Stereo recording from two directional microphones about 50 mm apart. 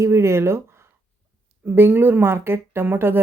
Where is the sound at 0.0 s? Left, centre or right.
Right.